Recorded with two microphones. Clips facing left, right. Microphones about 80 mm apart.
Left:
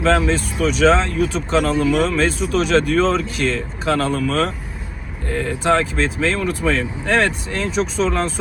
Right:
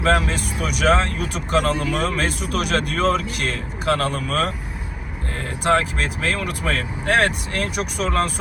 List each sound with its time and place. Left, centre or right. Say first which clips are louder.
0.2 s speech: left 6 dB; right